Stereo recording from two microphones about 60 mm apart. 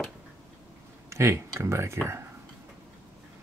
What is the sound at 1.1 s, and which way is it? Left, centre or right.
Speech, right.